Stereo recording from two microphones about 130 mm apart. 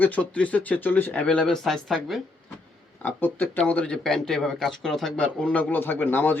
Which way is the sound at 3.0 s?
15° left (ahead or behind).